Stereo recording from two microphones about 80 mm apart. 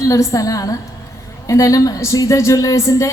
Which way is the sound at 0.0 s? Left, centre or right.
Left.